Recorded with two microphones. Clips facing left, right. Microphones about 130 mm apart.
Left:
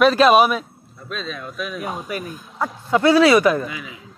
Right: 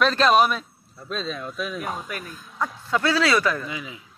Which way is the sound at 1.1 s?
30° right (ahead or behind).